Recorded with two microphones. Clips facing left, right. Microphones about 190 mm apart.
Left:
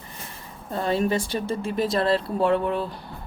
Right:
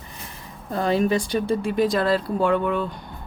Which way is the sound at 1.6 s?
Centre (ahead or behind).